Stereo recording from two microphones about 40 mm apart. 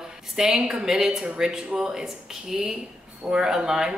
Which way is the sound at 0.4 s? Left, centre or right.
Centre.